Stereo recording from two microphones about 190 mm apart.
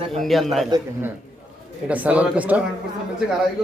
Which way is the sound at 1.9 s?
5° right (ahead or behind).